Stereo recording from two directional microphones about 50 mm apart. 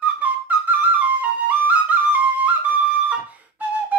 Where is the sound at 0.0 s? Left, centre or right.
Right.